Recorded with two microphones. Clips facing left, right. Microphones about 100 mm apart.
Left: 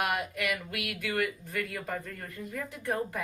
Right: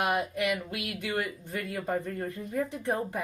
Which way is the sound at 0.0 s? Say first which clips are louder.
Right 3 dB; 25° right (ahead or behind).